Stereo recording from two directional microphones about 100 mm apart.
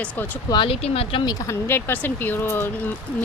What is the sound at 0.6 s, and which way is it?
Speech, 90° left.